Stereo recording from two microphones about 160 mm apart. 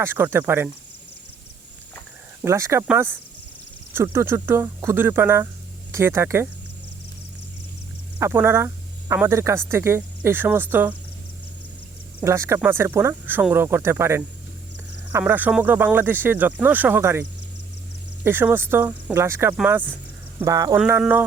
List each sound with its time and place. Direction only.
0.0 s speech: 15° right (ahead or behind)
2.4 s speech: 15° right (ahead or behind)
8.2 s speech: 15° right (ahead or behind)
12.2 s speech: 15° right (ahead or behind)
20.7 s speech: 10° right (ahead or behind)